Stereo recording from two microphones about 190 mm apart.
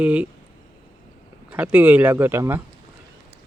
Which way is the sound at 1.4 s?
5° right (ahead or behind).